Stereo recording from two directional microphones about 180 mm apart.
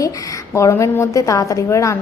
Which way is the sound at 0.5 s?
15° left (ahead or behind).